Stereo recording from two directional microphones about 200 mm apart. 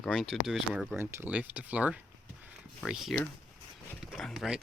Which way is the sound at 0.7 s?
15° right (ahead or behind).